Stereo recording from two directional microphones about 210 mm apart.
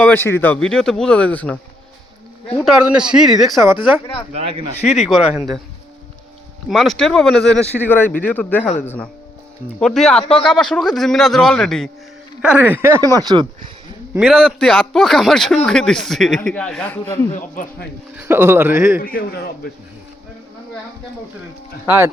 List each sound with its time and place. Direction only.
0.0 s speech: 10° left (ahead or behind)
2.6 s a man's voice: 5° right (ahead or behind)
4.3 s speech: 25° right (ahead or behind)
4.9 s a man's voice: centre (ahead or behind)
6.7 s a man's voice: centre (ahead or behind); by 13.5 s 20° right (ahead or behind)
14.1 s a man's voice: 5° right (ahead or behind)
17.3 s a man's voice: 40° left (ahead or behind)
18.2 s speech: 10° right (ahead or behind)
18.9 s a man's voice: 45° left (ahead or behind)
21.8 s speech: 10° right (ahead or behind)